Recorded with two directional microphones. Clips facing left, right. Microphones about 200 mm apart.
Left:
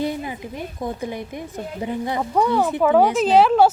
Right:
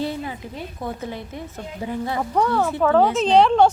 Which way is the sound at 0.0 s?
15° left (ahead or behind).